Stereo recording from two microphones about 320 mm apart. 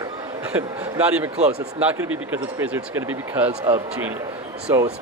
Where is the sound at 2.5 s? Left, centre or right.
Centre.